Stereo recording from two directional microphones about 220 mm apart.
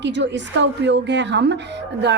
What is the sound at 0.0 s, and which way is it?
A woman's voice, 55° right (ahead or behind).